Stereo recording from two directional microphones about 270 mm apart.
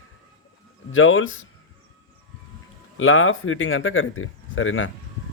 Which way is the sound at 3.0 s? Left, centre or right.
Left.